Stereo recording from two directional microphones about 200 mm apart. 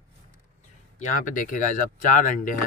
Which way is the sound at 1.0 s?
40° left (ahead or behind).